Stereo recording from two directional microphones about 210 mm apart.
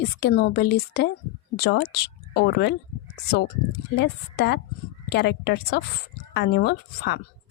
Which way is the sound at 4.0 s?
50° left (ahead or behind).